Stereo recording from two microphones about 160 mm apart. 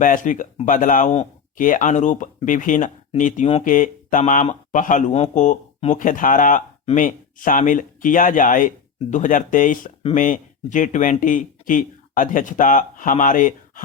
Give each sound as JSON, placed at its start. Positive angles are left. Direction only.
{"t": 0.0, "sound": "speech", "side_deg": 55}
{"t": 1.5, "sound": "speech", "side_deg": 55}
{"t": 3.6, "sound": "speech", "side_deg": 55}